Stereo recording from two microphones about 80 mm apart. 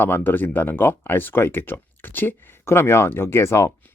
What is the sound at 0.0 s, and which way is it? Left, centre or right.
Speech, left.